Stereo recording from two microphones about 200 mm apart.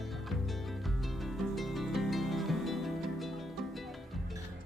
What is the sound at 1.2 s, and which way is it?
Music, centre (ahead or behind).